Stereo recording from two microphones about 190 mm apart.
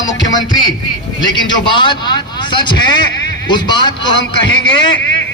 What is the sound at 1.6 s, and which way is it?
A man's voice, 25° left (ahead or behind).